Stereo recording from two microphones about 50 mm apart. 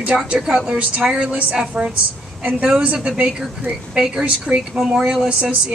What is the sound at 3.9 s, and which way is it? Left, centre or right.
A woman's voice, centre.